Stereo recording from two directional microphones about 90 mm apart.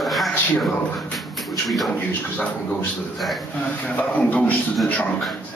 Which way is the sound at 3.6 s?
15° left (ahead or behind).